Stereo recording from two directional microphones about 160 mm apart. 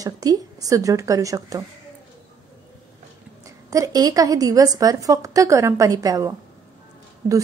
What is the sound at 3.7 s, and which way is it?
A woman's voice, 20° right (ahead or behind).